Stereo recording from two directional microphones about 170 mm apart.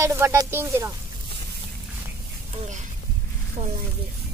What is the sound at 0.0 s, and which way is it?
Speech, 15° right (ahead or behind).